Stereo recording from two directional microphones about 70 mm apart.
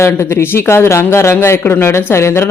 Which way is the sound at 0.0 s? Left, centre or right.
Left.